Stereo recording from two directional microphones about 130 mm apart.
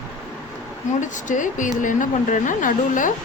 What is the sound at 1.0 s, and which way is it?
Speech, 75° left (ahead or behind).